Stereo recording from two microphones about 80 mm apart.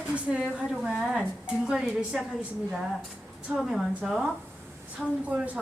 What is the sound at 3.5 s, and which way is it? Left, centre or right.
Speech, centre.